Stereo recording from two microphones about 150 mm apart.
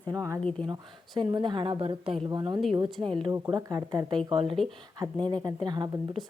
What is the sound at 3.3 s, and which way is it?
Speech, 25° right (ahead or behind).